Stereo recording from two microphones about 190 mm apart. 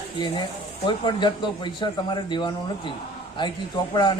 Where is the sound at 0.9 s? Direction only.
25° left (ahead or behind).